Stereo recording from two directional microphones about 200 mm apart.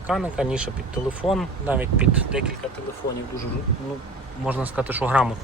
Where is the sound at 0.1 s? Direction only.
5° right (ahead or behind).